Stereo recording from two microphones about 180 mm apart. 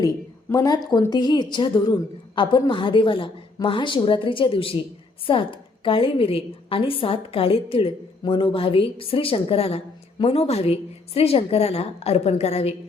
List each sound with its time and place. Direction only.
0.5 s a woman's voice: 20° left (ahead or behind); by 12.7 s 35° left (ahead or behind)